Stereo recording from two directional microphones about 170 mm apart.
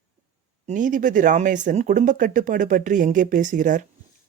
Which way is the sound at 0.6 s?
50° right (ahead or behind).